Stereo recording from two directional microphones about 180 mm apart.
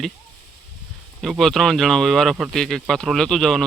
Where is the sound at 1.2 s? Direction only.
Centre (ahead or behind).